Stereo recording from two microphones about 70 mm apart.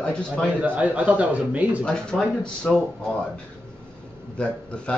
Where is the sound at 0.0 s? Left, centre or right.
Centre.